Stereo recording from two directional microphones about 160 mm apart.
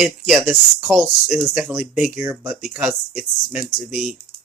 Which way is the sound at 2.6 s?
5° right (ahead or behind).